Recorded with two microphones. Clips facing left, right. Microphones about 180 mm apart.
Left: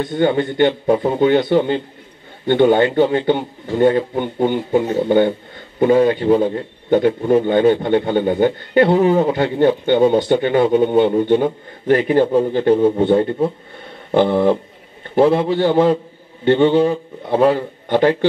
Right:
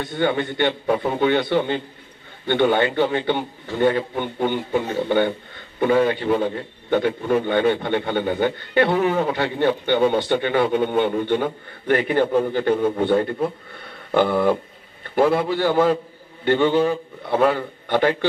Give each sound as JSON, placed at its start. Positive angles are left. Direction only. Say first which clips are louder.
{"t": 0.2, "sound": "a man's voice", "louder": "left 5 dB", "side_deg": 30}
{"t": 0.9, "sound": "a man's voice", "louder": "left 5 dB", "side_deg": 30}